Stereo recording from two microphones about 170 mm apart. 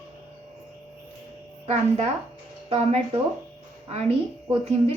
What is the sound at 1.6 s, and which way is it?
A woman's voice, 40° right (ahead or behind).